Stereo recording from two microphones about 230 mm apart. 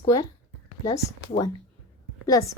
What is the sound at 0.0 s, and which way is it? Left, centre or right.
Speech, centre.